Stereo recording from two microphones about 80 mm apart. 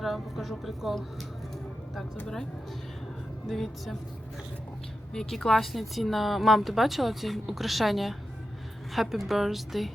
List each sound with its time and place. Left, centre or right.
0.0 s speech: centre
2.2 s speech: centre
3.5 s speech: centre
5.1 s speech: centre